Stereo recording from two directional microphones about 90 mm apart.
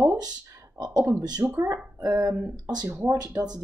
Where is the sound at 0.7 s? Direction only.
45° right (ahead or behind).